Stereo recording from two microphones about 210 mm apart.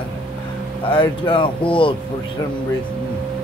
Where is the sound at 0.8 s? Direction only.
25° left (ahead or behind).